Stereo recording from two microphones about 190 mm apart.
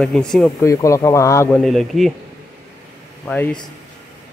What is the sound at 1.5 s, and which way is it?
Speech, centre (ahead or behind).